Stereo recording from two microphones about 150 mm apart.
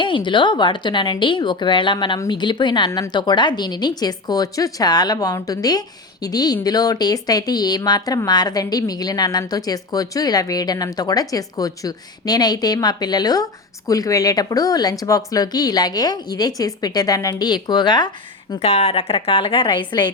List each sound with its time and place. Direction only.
0.0 s speech: 35° left (ahead or behind)
18.6 s a woman's voice: 45° left (ahead or behind)